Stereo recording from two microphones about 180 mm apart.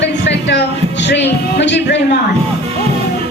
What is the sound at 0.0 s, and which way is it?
Music, 75° left (ahead or behind).